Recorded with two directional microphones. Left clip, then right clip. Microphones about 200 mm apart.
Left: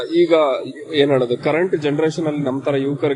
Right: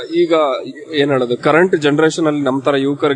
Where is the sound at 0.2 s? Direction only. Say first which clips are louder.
Right 1 dB; 30° right (ahead or behind).